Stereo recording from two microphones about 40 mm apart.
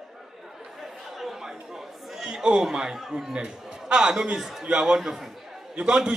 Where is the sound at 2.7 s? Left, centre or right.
Centre.